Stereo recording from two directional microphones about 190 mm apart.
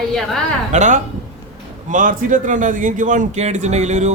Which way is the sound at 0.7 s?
40° right (ahead or behind).